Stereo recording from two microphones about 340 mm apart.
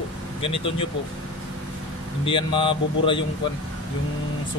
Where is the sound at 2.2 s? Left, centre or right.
Centre.